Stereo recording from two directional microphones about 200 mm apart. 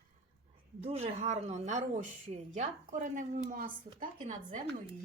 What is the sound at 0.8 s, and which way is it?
Speech, 30° right (ahead or behind).